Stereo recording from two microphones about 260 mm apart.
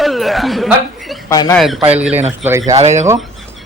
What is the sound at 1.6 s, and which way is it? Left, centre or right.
A man's voice, centre.